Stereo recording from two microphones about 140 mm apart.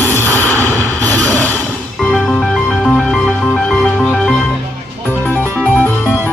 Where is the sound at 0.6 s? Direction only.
10° left (ahead or behind).